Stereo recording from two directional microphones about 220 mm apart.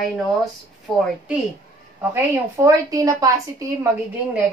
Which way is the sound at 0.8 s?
Centre (ahead or behind).